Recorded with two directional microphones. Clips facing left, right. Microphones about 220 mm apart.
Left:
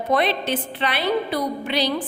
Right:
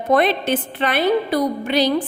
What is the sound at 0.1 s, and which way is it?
A woman's voice, 50° right (ahead or behind).